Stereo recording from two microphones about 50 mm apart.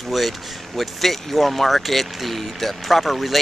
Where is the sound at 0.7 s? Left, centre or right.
Centre.